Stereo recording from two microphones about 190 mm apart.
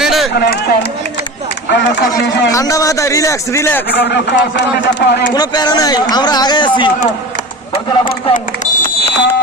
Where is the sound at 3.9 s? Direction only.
60° left (ahead or behind).